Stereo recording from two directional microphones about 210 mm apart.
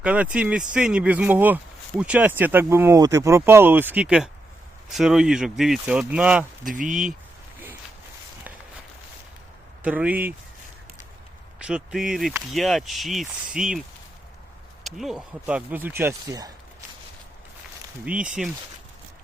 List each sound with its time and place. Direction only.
0.0 s speech: 5° right (ahead or behind)
6.7 s speech: 40° right (ahead or behind)
9.8 s speech: 5° right (ahead or behind)
11.6 s speech: 5° right (ahead or behind)
14.8 s speech: centre (ahead or behind)
18.0 s speech: 5° right (ahead or behind)